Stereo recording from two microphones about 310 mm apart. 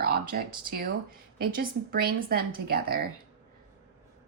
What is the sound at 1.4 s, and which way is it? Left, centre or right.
Speech, right.